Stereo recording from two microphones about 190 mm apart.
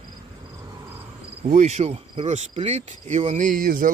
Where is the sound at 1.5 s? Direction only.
40° right (ahead or behind).